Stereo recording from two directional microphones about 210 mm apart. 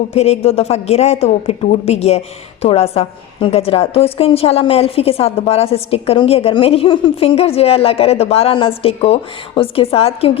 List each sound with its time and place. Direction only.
0.1 s speech: 30° left (ahead or behind)